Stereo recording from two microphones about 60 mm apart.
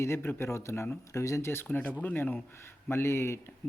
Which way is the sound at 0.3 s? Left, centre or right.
Left.